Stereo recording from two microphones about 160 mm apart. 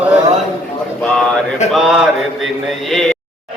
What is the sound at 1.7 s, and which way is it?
Mantra, centre (ahead or behind).